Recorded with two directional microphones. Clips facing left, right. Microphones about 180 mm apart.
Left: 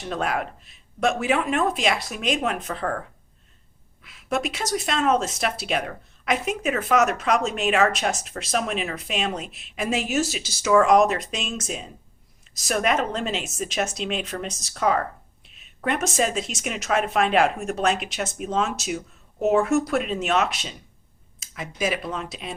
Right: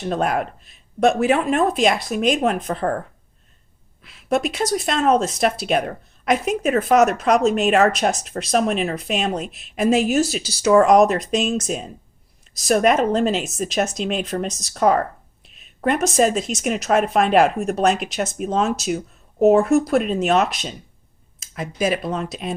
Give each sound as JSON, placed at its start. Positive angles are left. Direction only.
{"t": 0.0, "sound": "speech", "side_deg": -40}
{"t": 4.0, "sound": "speech", "side_deg": -35}